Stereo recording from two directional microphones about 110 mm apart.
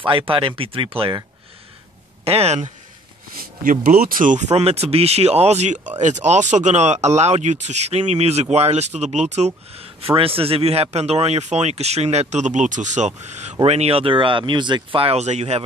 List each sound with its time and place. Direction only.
0.0 s speech: 55° right (ahead or behind)
2.2 s speech: 70° right (ahead or behind)
4.4 s speech: 80° right
13.7 s speech: 70° right (ahead or behind); by 15.6 s 85° right